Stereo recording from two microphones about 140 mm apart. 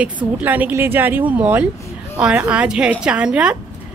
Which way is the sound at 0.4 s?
10° right (ahead or behind).